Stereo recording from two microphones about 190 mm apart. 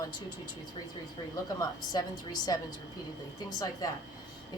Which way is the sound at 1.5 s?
20° left (ahead or behind).